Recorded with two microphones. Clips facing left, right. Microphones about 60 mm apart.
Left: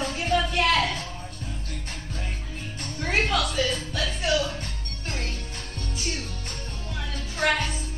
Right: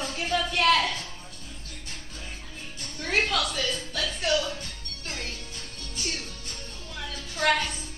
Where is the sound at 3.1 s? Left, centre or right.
Centre.